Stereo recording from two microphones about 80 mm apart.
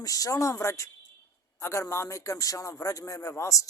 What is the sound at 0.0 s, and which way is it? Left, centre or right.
A man's voice, left.